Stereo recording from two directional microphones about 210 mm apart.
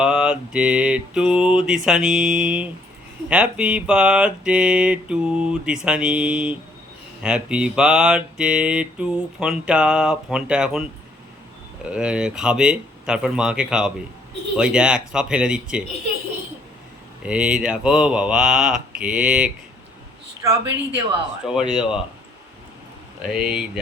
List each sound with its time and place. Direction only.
0.0 s mantra: 5° right (ahead or behind)
11.9 s mantra: 5° right (ahead or behind)
17.2 s mantra: 5° right (ahead or behind)
20.4 s speech: 15° right (ahead or behind)
21.4 s mantra: centre (ahead or behind)
23.2 s mantra: 5° right (ahead or behind)